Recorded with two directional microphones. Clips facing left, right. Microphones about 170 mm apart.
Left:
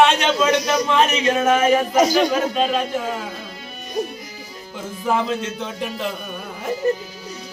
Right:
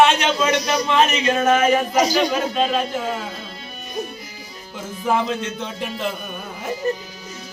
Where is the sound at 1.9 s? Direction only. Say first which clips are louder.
Left 2 dB; 50° left (ahead or behind).